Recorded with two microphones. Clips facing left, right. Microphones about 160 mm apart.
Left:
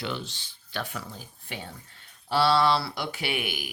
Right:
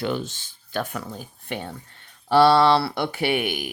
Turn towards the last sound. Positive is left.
turn(degrees=-55)  # may be behind; listen again after turning